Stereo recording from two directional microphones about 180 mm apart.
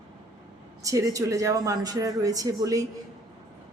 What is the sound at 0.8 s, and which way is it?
A woman's voice, 20° right (ahead or behind).